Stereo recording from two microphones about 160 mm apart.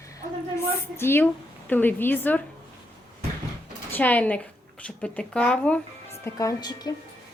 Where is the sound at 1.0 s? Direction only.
15° left (ahead or behind).